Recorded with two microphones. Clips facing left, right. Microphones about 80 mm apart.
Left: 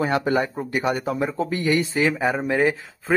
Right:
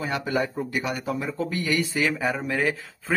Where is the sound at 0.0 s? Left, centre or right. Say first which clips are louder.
Left 5 dB; left.